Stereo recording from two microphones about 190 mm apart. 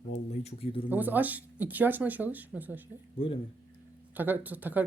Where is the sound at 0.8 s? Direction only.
10° right (ahead or behind).